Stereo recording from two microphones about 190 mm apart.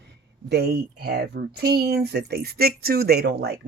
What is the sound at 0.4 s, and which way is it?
Speech, 60° right (ahead or behind).